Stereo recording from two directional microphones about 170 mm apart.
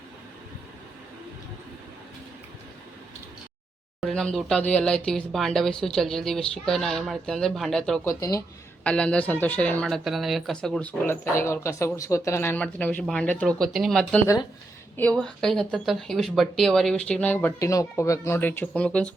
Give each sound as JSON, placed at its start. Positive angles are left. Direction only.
{"t": 4.0, "sound": "speech", "side_deg": 5}
{"t": 8.0, "sound": "speech", "side_deg": 20}
{"t": 8.8, "sound": "speech", "side_deg": 5}